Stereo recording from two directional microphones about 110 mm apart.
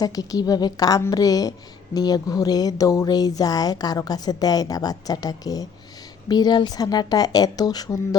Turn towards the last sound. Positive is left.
turn(degrees=35)  # may be behind; listen again after turning